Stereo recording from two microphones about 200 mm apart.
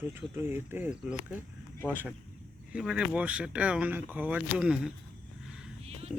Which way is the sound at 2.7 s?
5° right (ahead or behind).